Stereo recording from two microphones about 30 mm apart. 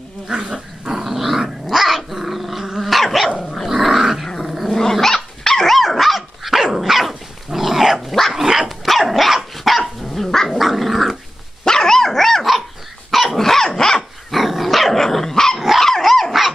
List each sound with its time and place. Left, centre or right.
0.3 s dog: centre
4.7 s dog: centre
5.7 s dog: centre
8.6 s dog: centre
10.2 s dog: centre
10.6 s dog: centre
11.6 s dog: centre
13.1 s dog: centre
13.4 s dog: centre
14.3 s dog: centre
15.0 s dog: centre